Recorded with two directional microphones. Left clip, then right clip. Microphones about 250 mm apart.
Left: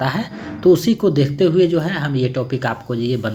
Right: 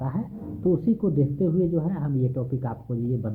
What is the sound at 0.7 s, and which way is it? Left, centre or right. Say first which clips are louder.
Speech: left 10 dB; left.